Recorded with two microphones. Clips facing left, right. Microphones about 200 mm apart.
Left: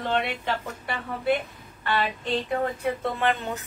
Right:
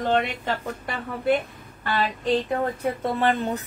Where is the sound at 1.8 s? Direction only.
40° right (ahead or behind).